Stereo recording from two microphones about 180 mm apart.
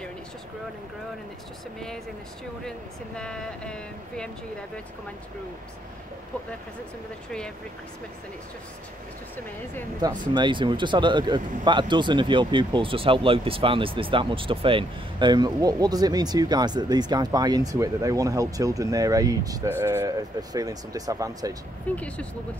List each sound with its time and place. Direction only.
3.2 s speech: 5° left (ahead or behind)
10.0 s speech: 25° right (ahead or behind)
21.9 s speech: 5° left (ahead or behind)